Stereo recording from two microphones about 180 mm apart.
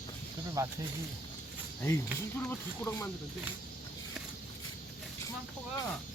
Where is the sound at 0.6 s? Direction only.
15° right (ahead or behind).